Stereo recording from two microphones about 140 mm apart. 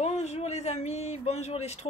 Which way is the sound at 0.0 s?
50° left (ahead or behind).